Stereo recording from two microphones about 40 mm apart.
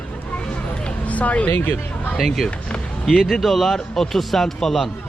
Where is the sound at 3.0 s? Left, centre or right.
Centre.